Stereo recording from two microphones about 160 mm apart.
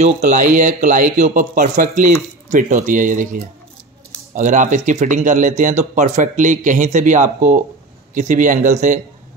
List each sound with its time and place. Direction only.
0.0 s speech: 50° right (ahead or behind)